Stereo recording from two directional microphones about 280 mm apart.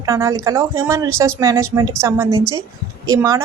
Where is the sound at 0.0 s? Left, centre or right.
Centre.